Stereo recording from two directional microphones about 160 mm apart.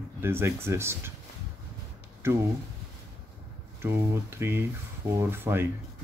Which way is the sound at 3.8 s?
15° right (ahead or behind).